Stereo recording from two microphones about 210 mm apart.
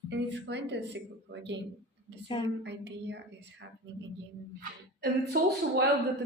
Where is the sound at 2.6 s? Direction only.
55° right (ahead or behind).